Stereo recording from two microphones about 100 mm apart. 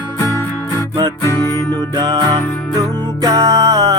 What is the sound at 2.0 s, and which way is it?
Music, 40° right (ahead or behind).